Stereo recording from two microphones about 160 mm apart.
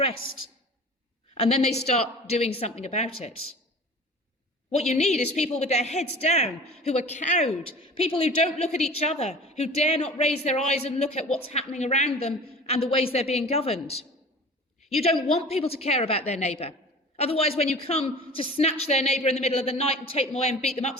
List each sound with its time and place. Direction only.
1.4 s a woman's voice: 35° left (ahead or behind)
4.8 s a woman's voice: 45° left (ahead or behind)
15.0 s a woman's voice: 40° left (ahead or behind)